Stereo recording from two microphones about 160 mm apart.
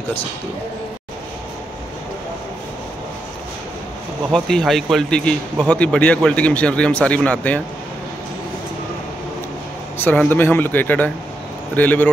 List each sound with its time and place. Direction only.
4.3 s speech: 5° left (ahead or behind)
9.9 s speech: 10° left (ahead or behind)